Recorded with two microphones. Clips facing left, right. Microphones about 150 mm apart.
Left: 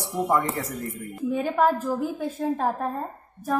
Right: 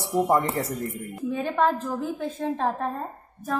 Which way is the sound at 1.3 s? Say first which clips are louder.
Left 2 dB; 10° left (ahead or behind).